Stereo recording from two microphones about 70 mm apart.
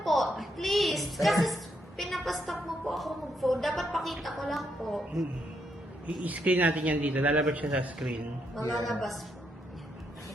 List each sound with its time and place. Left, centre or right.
0.0 s a sound: centre
6.2 s a man's voice: right
8.7 s a woman's voice: centre